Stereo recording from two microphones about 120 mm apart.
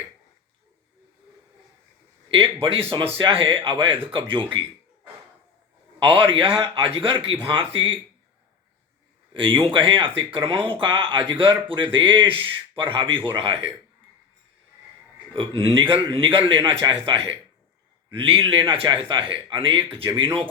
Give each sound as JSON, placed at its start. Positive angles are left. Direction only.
{"t": 2.3, "sound": "speech", "side_deg": -50}
{"t": 6.0, "sound": "speech", "side_deg": -50}
{"t": 9.3, "sound": "a man's voice", "side_deg": -45}
{"t": 15.3, "sound": "speech", "side_deg": -50}